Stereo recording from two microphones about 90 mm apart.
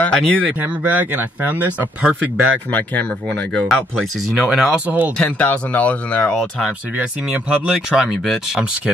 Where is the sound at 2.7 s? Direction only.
15° left (ahead or behind).